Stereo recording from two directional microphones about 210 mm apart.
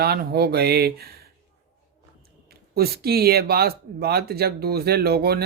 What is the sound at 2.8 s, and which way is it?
Speech, 50° right (ahead or behind).